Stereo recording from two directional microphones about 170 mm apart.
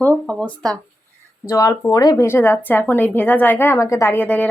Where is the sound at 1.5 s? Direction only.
20° left (ahead or behind).